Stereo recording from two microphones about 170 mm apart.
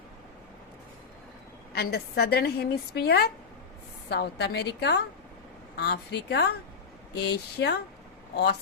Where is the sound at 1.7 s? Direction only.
70° left (ahead or behind).